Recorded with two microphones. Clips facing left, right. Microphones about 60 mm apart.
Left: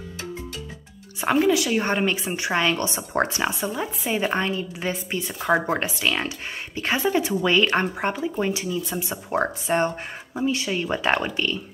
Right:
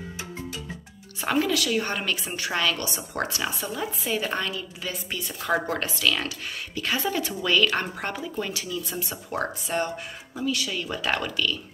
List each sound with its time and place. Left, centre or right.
1.2 s a woman's voice: centre